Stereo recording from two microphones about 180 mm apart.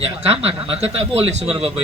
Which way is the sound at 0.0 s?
35° right (ahead or behind).